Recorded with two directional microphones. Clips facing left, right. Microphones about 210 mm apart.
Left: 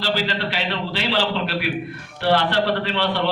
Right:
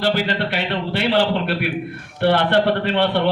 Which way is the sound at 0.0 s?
55° right (ahead or behind).